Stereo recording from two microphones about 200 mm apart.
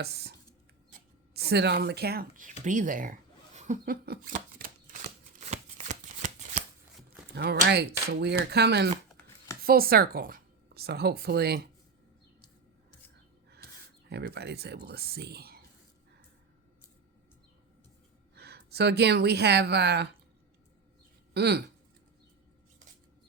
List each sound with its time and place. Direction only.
0.0 s speech: 55° right (ahead or behind)
1.3 s a sound: 55° right (ahead or behind); by 6.6 s 35° right (ahead or behind)
7.3 s speech: 55° right (ahead or behind)
14.1 s speech: 55° right (ahead or behind)
18.3 s a woman's voice: 55° right (ahead or behind)
21.3 s speech: 55° right (ahead or behind)